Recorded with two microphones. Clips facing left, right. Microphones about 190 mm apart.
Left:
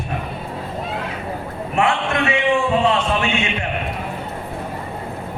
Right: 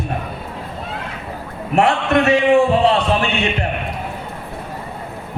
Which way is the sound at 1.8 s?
40° right (ahead or behind).